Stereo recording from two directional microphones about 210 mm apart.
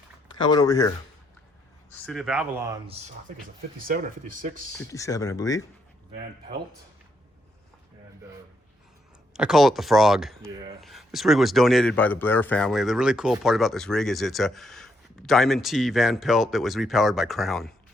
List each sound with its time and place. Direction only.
0.3 s speech: 20° left (ahead or behind)
1.9 s speech: centre (ahead or behind); by 2.9 s 15° right (ahead or behind)
3.8 s speech: 40° right (ahead or behind)
4.8 s speech: 15° left (ahead or behind)
9.3 s speech: centre (ahead or behind)
10.4 s speech: 15° right (ahead or behind)
10.8 s speech: centre (ahead or behind)